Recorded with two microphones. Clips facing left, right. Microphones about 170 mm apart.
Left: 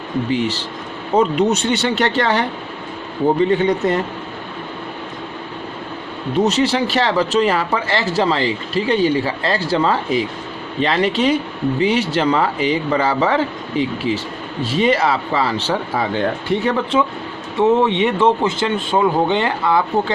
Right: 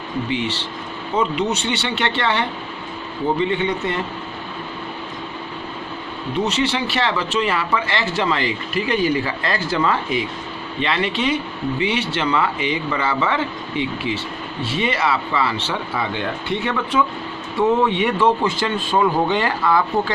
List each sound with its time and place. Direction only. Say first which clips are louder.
0.3 s speech: left 4 dB; 40° left (ahead or behind)
6.4 s speech: left 5 dB; 40° left (ahead or behind); by 19.8 s 25° left (ahead or behind)